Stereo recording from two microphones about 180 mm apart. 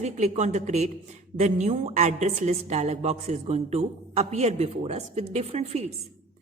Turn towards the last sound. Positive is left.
turn(degrees=-35)  # may be behind; listen again after turning